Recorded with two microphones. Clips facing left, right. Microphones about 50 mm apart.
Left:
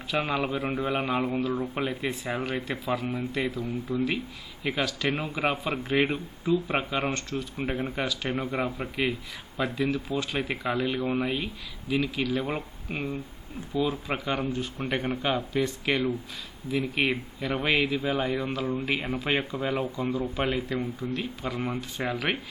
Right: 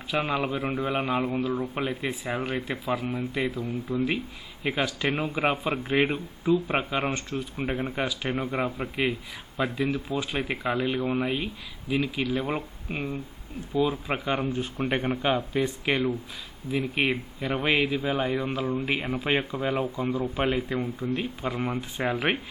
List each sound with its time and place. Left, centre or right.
0.1 s speech: centre
4.6 s speech: centre
14.3 s speech: right
16.7 s speech: centre
19.0 s speech: centre
19.3 s speech: centre
21.0 s speech: right